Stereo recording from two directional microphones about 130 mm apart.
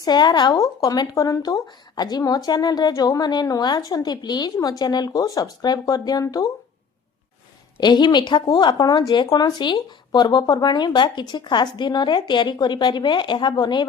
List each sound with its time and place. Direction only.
0.0 s speech: 35° left (ahead or behind)
7.8 s speech: 35° left (ahead or behind)